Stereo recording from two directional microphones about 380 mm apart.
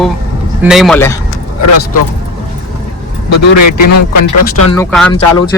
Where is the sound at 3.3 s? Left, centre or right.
Left.